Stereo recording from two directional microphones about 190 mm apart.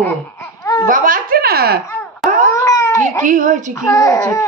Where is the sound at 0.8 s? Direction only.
45° right (ahead or behind).